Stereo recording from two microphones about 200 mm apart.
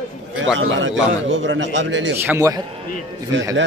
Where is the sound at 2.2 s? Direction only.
10° right (ahead or behind).